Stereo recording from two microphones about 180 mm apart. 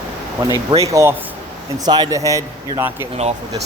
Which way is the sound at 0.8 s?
15° right (ahead or behind).